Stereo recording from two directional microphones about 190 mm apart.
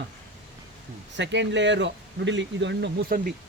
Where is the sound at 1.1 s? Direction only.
70° right (ahead or behind).